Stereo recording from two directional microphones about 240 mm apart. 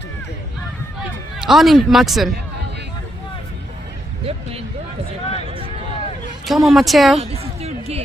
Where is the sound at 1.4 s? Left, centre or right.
Centre.